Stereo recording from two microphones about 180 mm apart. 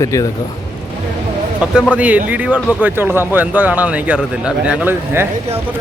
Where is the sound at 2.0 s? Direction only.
10° right (ahead or behind).